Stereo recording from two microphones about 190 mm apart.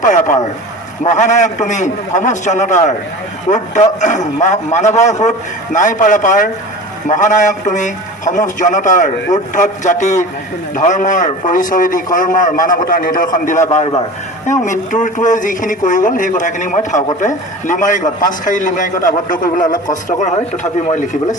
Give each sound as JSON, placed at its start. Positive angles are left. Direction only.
{"t": 0.0, "sound": "a man's voice", "side_deg": 40}
{"t": 3.5, "sound": "a man's voice", "side_deg": 25}
{"t": 4.0, "sound": "a man's voice", "side_deg": 40}